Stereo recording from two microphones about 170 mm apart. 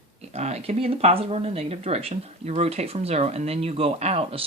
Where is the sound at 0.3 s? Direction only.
40° right (ahead or behind).